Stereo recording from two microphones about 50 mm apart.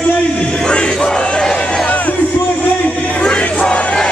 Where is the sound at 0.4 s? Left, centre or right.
Centre.